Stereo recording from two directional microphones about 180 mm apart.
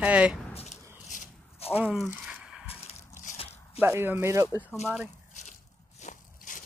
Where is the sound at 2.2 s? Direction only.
5° right (ahead or behind).